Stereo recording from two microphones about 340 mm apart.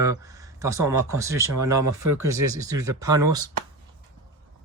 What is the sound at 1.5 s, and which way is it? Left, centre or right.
Speech, right.